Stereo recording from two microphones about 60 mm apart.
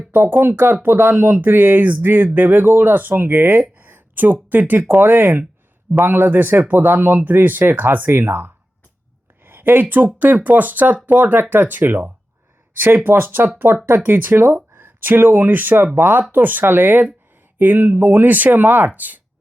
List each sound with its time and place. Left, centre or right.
0.1 s speech: right
9.4 s a sound: right
10.2 s speech: right